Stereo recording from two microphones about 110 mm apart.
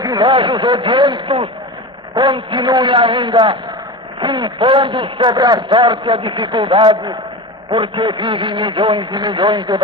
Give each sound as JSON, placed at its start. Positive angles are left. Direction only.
{"t": 0.0, "sound": "a man's voice", "side_deg": -40}